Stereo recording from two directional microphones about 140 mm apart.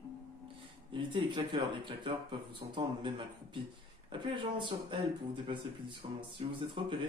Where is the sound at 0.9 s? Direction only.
35° right (ahead or behind).